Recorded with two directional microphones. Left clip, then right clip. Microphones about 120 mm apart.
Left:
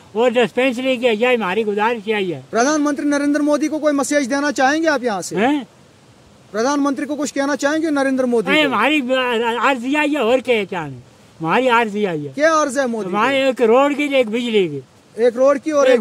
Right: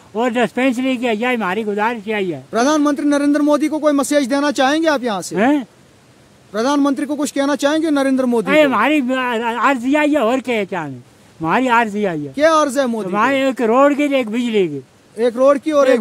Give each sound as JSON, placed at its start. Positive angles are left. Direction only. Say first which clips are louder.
{"t": 0.1, "sound": "speech", "louder": "left 2 dB", "side_deg": -25}